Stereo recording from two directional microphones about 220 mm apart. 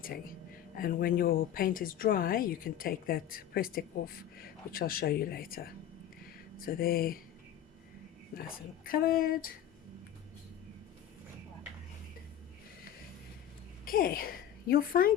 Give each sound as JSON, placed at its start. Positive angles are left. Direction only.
{"t": 0.8, "sound": "speech", "side_deg": 40}
{"t": 8.3, "sound": "speech", "side_deg": 40}
{"t": 13.8, "sound": "a woman's voice", "side_deg": 40}